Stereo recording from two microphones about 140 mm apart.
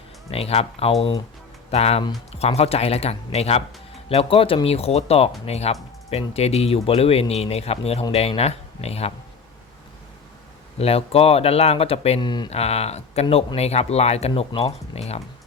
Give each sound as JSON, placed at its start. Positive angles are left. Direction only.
{"t": 0.3, "sound": "speech", "side_deg": 45}
{"t": 10.8, "sound": "speech", "side_deg": 45}
{"t": 12.2, "sound": "speech", "side_deg": 30}
{"t": 12.5, "sound": "speech", "side_deg": 50}